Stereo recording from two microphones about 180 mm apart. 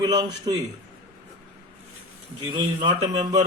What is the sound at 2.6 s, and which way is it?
Speech, 25° right (ahead or behind).